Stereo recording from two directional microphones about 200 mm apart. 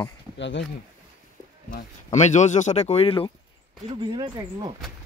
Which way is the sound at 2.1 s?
35° left (ahead or behind).